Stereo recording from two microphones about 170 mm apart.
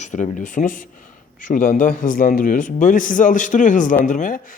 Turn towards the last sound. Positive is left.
turn(degrees=50)  # may be behind; listen again after turning